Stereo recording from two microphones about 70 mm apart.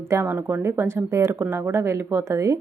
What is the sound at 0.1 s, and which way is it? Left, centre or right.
A woman's voice, right.